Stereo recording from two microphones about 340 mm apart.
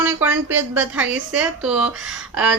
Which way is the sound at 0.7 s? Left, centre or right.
Centre.